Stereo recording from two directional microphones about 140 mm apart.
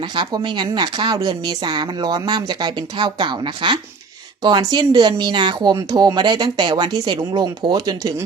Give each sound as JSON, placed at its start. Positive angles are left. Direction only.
{"t": 0.0, "sound": "speech", "side_deg": -35}